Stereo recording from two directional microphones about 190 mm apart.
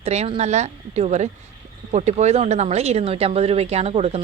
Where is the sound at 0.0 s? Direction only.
35° right (ahead or behind).